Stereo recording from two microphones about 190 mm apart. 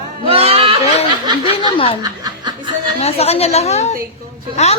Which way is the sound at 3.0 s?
35° left (ahead or behind).